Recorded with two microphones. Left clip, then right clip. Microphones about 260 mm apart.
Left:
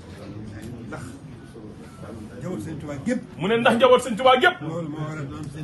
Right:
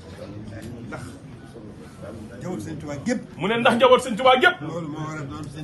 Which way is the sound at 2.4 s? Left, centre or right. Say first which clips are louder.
Even; right.